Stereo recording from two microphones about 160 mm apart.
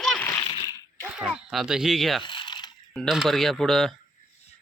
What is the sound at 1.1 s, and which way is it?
Speech, 5° right (ahead or behind).